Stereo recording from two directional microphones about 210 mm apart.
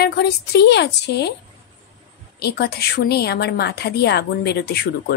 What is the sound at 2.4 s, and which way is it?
Speech, 50° left (ahead or behind).